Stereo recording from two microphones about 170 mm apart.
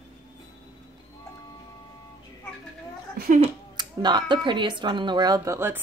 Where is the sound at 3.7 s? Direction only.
25° right (ahead or behind).